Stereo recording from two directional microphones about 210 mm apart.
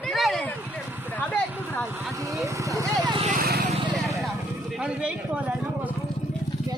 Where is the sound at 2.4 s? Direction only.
20° right (ahead or behind).